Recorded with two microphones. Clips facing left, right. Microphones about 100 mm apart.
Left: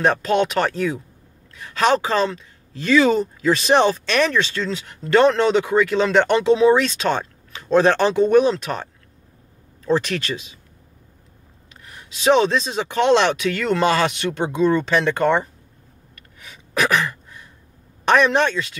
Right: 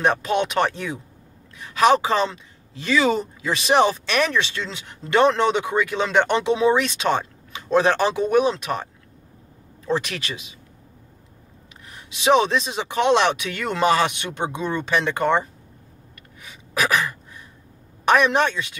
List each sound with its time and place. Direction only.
0.0 s speech: 15° right (ahead or behind)
9.8 s speech: 15° right (ahead or behind)
11.9 s speech: 15° right (ahead or behind)
16.4 s a sound: 10° right (ahead or behind)
18.0 s speech: 10° right (ahead or behind)